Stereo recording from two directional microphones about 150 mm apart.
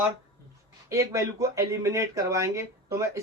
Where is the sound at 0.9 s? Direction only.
20° right (ahead or behind).